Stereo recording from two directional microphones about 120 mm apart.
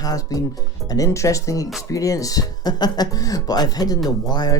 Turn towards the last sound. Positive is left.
turn(degrees=35)  # may be behind; listen again after turning